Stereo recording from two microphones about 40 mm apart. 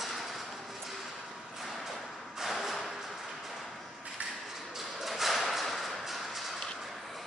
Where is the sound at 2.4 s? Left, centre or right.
Centre.